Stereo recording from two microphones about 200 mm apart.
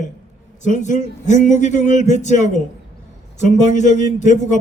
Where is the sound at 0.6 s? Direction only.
40° left (ahead or behind).